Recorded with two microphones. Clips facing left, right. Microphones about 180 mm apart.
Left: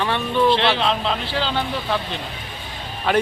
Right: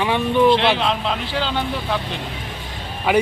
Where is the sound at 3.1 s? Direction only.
10° right (ahead or behind).